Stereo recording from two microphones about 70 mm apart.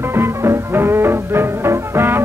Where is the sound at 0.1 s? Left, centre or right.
Right.